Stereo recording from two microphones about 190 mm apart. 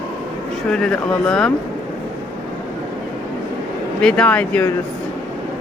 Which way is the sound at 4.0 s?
5° left (ahead or behind).